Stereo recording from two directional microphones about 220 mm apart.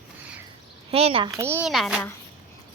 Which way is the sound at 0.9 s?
25° right (ahead or behind).